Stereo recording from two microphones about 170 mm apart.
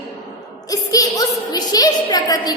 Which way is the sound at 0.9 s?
20° left (ahead or behind).